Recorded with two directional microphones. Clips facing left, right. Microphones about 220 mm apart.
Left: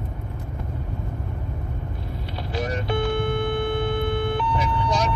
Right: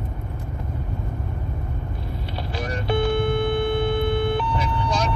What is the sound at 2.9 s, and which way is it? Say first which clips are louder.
Vehicle: right 4 dB; 30° right (ahead or behind).